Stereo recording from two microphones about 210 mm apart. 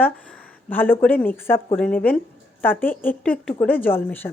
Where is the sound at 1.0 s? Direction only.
10° left (ahead or behind).